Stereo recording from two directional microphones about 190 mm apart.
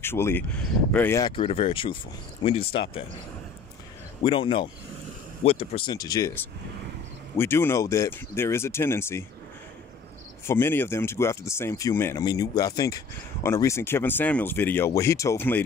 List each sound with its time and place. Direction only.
0.0 s speech: 10° left (ahead or behind)
1.3 s speech: 30° left (ahead or behind)
4.2 s speech: 25° left (ahead or behind)
10.4 s speech: 10° left (ahead or behind)